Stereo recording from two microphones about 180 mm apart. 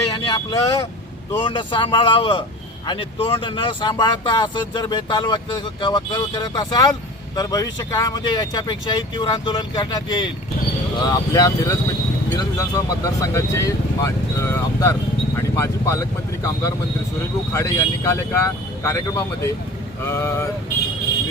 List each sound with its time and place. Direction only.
0.1 s vehicle: 25° left (ahead or behind)
1.4 s speech: 25° left (ahead or behind)